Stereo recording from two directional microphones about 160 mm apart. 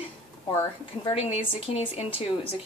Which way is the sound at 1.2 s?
40° left (ahead or behind).